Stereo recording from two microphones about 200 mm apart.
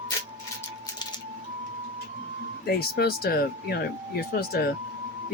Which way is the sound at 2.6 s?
50° left (ahead or behind).